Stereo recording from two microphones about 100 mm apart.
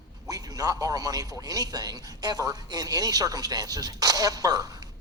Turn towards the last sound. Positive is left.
turn(degrees=-40)  # may be behind; listen again after turning